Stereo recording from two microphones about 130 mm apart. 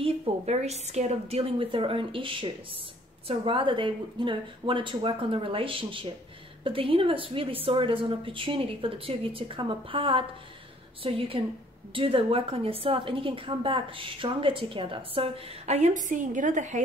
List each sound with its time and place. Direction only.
0.0 s a woman's voice: 55° right (ahead or behind)